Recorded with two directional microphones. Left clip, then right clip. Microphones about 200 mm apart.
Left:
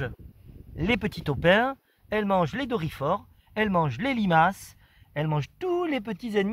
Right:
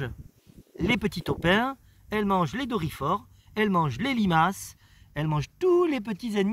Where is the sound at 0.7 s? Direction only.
50° left (ahead or behind).